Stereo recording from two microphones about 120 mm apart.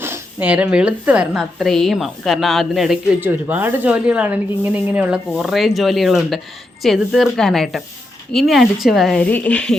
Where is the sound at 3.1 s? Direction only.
15° right (ahead or behind).